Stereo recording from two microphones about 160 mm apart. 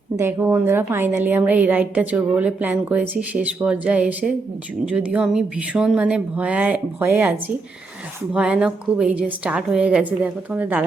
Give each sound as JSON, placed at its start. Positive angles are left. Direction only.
{"t": 0.2, "sound": "a woman's voice", "side_deg": -15}